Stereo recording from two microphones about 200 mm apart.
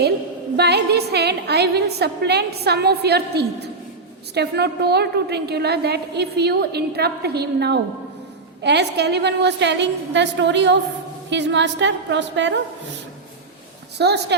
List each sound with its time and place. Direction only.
0.5 s a woman's voice: 55° right (ahead or behind)
14.0 s a woman's voice: 55° right (ahead or behind)